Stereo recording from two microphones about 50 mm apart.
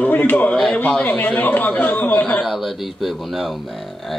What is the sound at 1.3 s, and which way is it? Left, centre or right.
Speech, left.